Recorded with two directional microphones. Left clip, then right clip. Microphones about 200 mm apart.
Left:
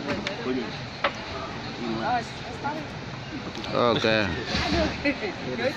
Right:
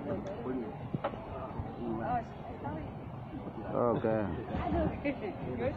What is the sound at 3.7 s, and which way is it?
Speech, 20° left (ahead or behind).